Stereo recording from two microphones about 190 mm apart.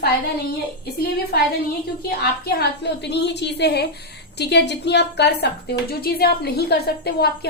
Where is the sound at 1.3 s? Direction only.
55° left (ahead or behind).